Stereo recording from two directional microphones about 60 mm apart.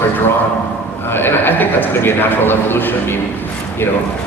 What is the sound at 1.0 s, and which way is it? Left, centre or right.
Speech, left.